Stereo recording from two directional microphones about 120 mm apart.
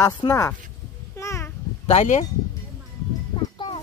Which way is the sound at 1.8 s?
75° left (ahead or behind).